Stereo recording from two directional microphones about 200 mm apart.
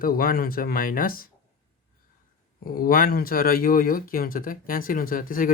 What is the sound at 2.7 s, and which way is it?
Speech, 45° left (ahead or behind).